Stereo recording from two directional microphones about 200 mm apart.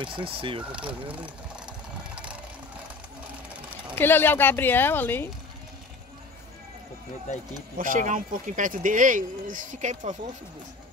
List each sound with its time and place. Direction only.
0.0 s speech: 25° right (ahead or behind)
1.0 s vehicle: 5° right (ahead or behind)
3.9 s a woman's voice: 10° left (ahead or behind)
7.7 s speech: 40° right (ahead or behind)